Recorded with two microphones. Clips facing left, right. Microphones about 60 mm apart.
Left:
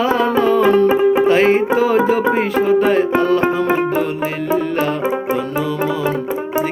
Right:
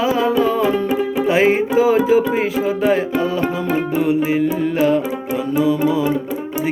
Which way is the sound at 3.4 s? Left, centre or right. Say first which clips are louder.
Left 4 dB; left.